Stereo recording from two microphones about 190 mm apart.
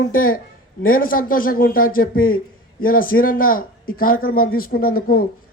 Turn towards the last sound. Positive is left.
turn(degrees=50)  # may be behind; listen again after turning